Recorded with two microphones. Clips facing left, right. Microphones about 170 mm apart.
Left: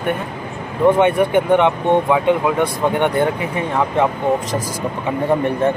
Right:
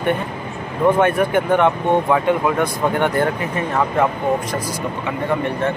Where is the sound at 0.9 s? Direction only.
20° left (ahead or behind).